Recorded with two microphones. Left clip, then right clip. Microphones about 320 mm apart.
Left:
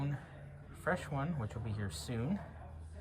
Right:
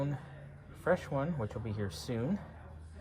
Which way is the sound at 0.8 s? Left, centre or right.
Centre.